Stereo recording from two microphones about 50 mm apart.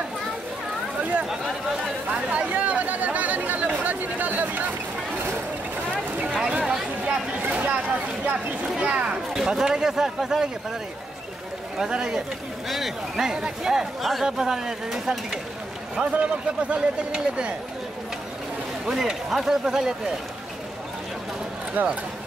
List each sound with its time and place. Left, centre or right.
2.3 s chatter: right
6.6 s a sound: centre
7.5 s speech: right
9.3 s speech: centre
11.8 s speech: centre
16.0 s speech: right
18.9 s speech: centre
21.8 s speech: right